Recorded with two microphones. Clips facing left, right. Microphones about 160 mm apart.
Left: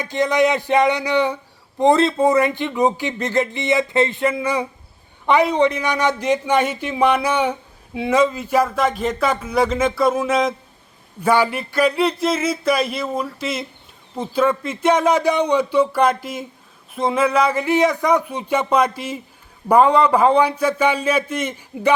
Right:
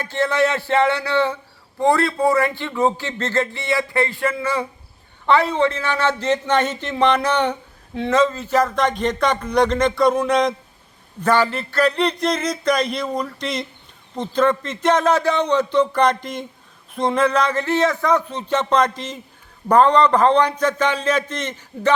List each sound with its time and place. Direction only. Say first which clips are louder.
0.0 s a man's voice: left 2 dB; 15° left (ahead or behind)